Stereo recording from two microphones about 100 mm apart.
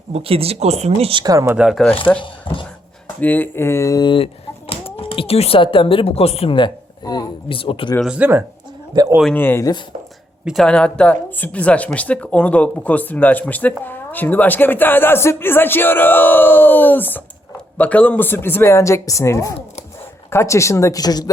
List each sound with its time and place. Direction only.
0.1 s speech: 70° right (ahead or behind); by 1.1 s 90° right
1.3 s speech: 30° right (ahead or behind)
1.7 s speech: 5° left (ahead or behind)
2.2 s speech: 55° left (ahead or behind)
3.2 s speech: 15° left (ahead or behind)
4.0 s a sound: 60° left (ahead or behind)
4.9 s speech: 75° left (ahead or behind)
6.6 s a sound: 40° left (ahead or behind)
7.4 s speech: 60° left (ahead or behind)
8.0 s speech: 10° right (ahead or behind)
8.9 s a man's voice: 45° right (ahead or behind)
9.3 s speech: 20° left (ahead or behind)
10.4 s speech: centre (ahead or behind)
10.7 s speech: 10° left (ahead or behind); by 21.2 s 40° left (ahead or behind)